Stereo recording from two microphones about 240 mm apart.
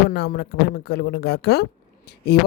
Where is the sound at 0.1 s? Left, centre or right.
Left.